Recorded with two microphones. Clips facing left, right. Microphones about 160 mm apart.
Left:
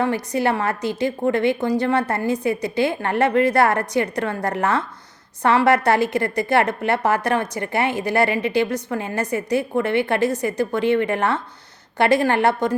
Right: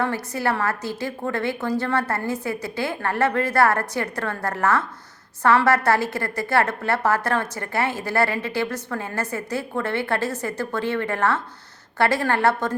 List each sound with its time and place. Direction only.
0.0 s a woman's voice: 20° left (ahead or behind)